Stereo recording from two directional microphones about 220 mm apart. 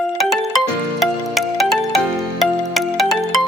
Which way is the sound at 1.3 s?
Centre (ahead or behind).